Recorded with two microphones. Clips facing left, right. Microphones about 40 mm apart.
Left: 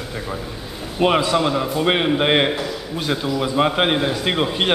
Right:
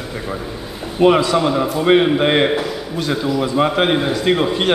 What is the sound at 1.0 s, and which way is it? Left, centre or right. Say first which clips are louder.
A man's voice: right 4 dB; centre.